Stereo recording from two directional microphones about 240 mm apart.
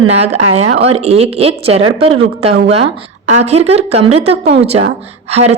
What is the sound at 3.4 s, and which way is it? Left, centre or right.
A woman's voice, right.